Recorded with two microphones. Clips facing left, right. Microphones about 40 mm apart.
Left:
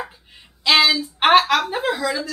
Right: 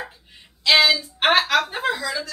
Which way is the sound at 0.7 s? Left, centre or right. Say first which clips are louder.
Left 1 dB; centre.